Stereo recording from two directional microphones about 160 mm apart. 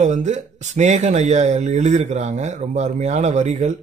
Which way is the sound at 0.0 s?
45° right (ahead or behind).